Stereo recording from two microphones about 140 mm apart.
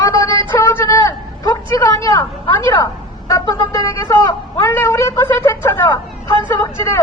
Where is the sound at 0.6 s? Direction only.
20° left (ahead or behind).